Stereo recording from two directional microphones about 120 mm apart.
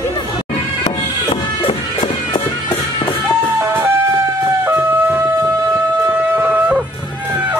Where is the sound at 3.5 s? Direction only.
20° right (ahead or behind).